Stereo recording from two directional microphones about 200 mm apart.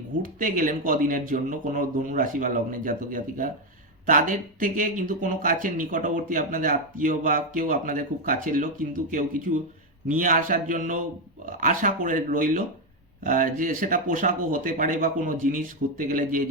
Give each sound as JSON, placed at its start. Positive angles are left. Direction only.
{"t": 0.2, "sound": "speech", "side_deg": -40}